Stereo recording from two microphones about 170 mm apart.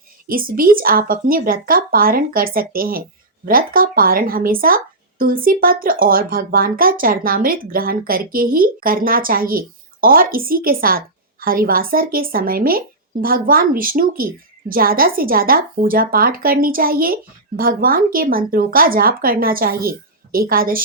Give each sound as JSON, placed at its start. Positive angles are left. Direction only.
{"t": 0.3, "sound": "speech", "side_deg": -55}